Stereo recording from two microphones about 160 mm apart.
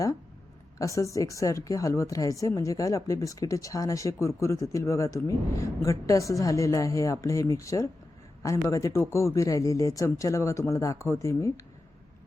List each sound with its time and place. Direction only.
0.8 s speech: 20° left (ahead or behind)